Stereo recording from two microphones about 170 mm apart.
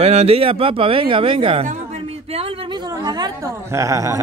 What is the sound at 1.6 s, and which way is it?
A woman's voice, 45° right (ahead or behind).